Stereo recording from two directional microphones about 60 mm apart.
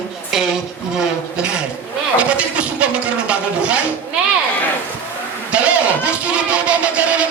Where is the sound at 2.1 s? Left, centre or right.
Centre.